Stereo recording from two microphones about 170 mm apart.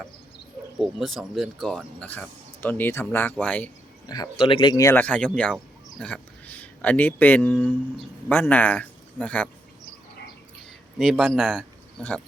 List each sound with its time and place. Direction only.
0.8 s speech: centre (ahead or behind)
4.0 s speech: 20° left (ahead or behind)
10.9 s speech: 5° right (ahead or behind)